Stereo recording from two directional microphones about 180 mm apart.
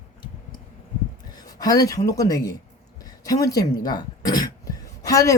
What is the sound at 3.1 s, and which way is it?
Throat clearing, 20° left (ahead or behind).